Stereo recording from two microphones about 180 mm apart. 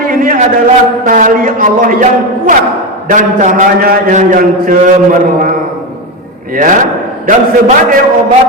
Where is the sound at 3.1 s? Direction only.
45° right (ahead or behind).